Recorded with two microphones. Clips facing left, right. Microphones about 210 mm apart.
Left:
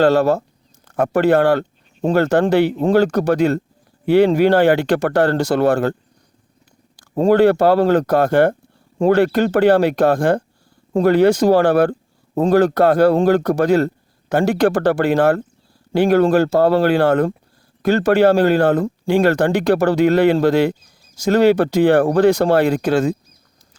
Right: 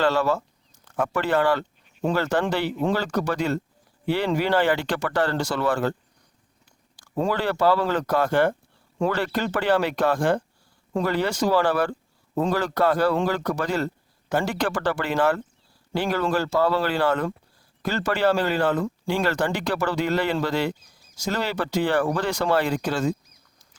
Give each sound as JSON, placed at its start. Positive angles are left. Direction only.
{"t": 0.0, "sound": "speech", "side_deg": 60}
{"t": 7.3, "sound": "speech", "side_deg": 60}
{"t": 9.8, "sound": "speech", "side_deg": 45}
{"t": 11.0, "sound": "speech", "side_deg": 55}
{"t": 22.3, "sound": "speech", "side_deg": 40}
{"t": 22.5, "sound": "speech", "side_deg": 60}